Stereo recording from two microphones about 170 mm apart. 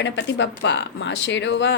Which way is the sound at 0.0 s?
90° left.